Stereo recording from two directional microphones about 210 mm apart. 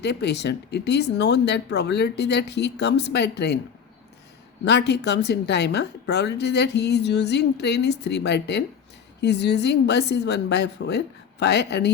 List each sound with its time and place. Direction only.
0.0 s a woman's voice: 50° left (ahead or behind)
4.6 s a woman's voice: 55° left (ahead or behind)